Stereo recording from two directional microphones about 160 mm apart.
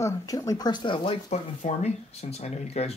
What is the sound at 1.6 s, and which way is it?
Speech, 45° left (ahead or behind).